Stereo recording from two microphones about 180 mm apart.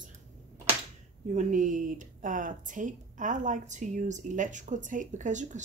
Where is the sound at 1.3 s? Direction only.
45° right (ahead or behind).